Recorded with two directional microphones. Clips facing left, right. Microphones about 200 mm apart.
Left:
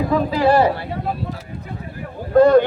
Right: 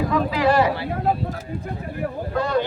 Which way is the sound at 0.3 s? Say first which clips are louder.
Left 4 dB; 30° left (ahead or behind).